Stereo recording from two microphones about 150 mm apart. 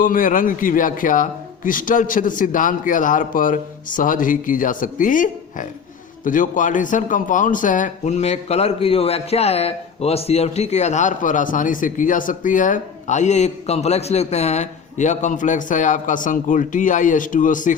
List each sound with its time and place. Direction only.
0.0 s a man's voice: 65° left (ahead or behind)